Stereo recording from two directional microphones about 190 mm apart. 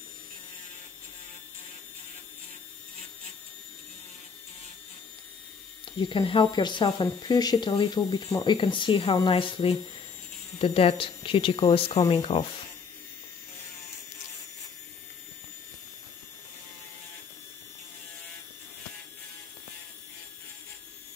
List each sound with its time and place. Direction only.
5.9 s speech: 25° left (ahead or behind)